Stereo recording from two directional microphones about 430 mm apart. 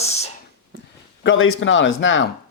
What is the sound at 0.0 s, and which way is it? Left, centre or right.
Whispering, centre.